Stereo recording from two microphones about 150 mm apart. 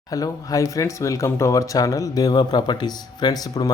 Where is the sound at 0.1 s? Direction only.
25° left (ahead or behind).